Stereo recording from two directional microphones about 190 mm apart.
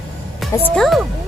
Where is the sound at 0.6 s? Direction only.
Centre (ahead or behind).